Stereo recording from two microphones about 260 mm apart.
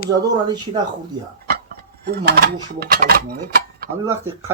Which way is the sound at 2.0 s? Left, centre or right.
Right.